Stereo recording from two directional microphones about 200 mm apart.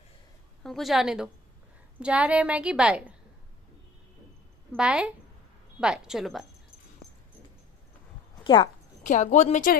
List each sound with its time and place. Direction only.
0.7 s a woman's voice: centre (ahead or behind)
4.7 s a woman's voice: 5° right (ahead or behind)
9.0 s speech: 40° left (ahead or behind)